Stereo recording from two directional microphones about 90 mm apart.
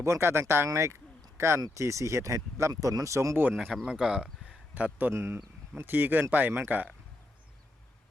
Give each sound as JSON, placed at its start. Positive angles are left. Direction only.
{"t": 0.0, "sound": "speech", "side_deg": -30}
{"t": 3.7, "sound": "speech", "side_deg": -10}
{"t": 5.1, "sound": "speech", "side_deg": -30}